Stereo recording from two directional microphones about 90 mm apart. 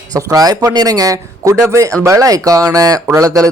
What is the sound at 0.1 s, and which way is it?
Speech, 40° right (ahead or behind).